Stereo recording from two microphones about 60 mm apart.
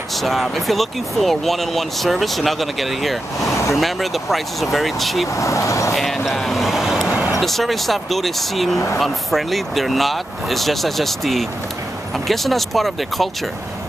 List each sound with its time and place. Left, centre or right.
0.1 s speech: centre
5.3 s speech: left
5.9 s speech: centre
7.2 s a sound: centre
7.4 s speech: centre